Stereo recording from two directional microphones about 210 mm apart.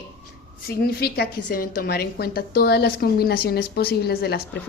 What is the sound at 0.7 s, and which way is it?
A woman's voice, 50° left (ahead or behind).